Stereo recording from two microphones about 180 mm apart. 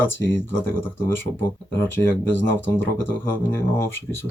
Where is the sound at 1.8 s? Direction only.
10° left (ahead or behind).